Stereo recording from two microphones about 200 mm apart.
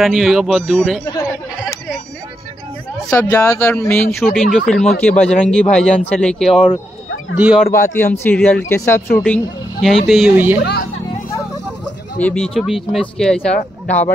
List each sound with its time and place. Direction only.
0.0 s speech: centre (ahead or behind)
3.1 s speech: 15° left (ahead or behind); by 7.6 s 5° right (ahead or behind)
7.9 s speech: 10° left (ahead or behind); by 10.6 s 10° right (ahead or behind)
10.6 s speech: 55° left (ahead or behind)
12.2 s speech: 5° left (ahead or behind)